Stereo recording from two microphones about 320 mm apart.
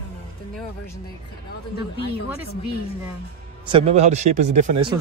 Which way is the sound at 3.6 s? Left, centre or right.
Centre.